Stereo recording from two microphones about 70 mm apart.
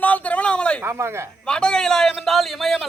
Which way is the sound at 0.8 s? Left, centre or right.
Right.